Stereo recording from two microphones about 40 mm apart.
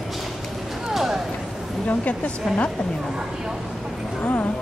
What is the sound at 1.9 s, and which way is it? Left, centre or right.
Speech, left.